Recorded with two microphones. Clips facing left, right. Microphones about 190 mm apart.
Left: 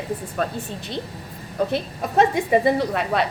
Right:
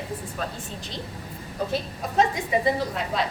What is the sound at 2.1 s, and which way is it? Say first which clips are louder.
Speech: left 5 dB; 65° left (ahead or behind).